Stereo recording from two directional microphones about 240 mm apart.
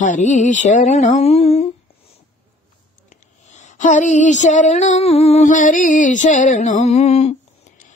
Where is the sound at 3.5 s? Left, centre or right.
Left.